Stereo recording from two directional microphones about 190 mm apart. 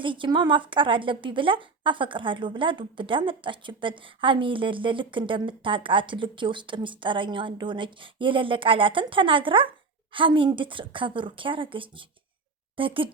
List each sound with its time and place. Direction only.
0.0 s a woman's voice: 25° right (ahead or behind)